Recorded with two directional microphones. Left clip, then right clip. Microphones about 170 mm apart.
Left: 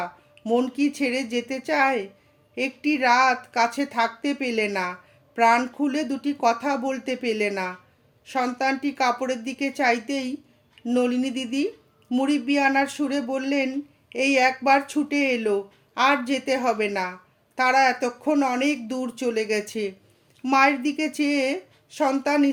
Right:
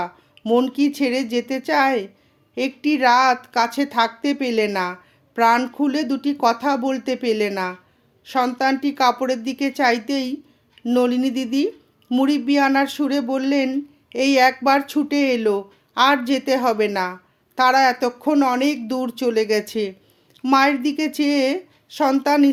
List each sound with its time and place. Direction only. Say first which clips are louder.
0.0 s speech: right 4 dB; 35° right (ahead or behind)